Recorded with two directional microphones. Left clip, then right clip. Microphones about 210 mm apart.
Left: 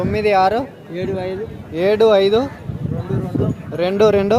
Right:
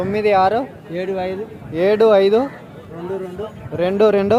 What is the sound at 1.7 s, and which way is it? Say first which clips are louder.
Speech: even; 10° right (ahead or behind).